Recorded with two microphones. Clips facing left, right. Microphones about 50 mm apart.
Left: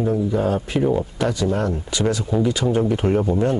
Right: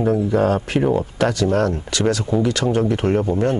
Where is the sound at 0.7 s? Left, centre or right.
Centre.